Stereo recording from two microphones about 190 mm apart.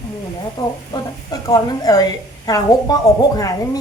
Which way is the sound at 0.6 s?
20° left (ahead or behind).